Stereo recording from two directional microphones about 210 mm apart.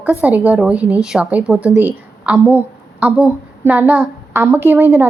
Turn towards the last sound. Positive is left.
turn(degrees=-10)  # may be behind; listen again after turning